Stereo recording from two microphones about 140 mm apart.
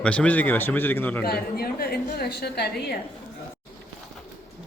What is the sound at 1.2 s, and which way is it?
A woman's voice, 90° left.